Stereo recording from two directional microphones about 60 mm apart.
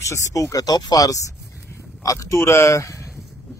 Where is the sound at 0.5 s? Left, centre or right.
Left.